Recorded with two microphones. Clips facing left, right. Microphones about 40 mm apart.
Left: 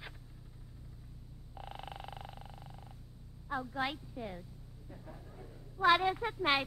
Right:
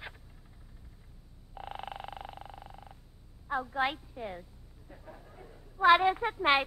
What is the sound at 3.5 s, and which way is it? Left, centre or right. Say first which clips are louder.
Speech: right 5 dB; right.